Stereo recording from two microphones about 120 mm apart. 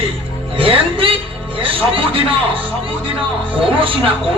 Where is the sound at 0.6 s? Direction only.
50° right (ahead or behind).